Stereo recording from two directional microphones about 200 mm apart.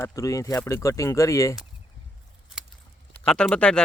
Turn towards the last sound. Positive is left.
turn(degrees=5)  # may be behind; listen again after turning